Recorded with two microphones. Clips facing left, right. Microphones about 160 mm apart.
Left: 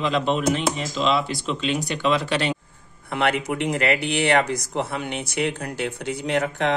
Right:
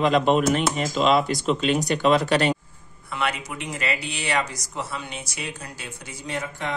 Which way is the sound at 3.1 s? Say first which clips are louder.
Left 6 dB; 60° left (ahead or behind).